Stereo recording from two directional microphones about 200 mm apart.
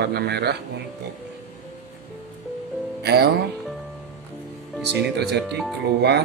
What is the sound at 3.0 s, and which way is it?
Music, 55° right (ahead or behind).